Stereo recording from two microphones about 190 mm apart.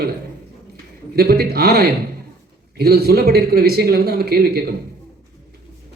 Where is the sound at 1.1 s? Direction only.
55° right (ahead or behind).